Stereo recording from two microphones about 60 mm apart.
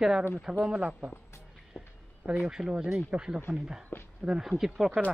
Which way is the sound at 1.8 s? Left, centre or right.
Centre.